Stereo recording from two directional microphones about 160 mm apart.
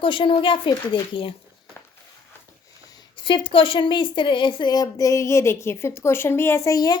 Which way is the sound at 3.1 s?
30° left (ahead or behind).